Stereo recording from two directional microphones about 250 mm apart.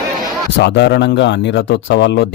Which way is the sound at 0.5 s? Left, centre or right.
Left.